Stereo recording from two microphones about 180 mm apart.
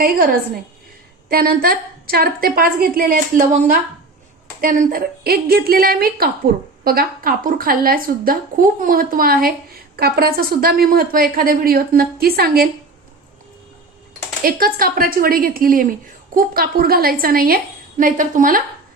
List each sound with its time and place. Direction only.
0.0 s a woman's voice: 55° right (ahead or behind)
14.4 s a woman's voice: 55° right (ahead or behind)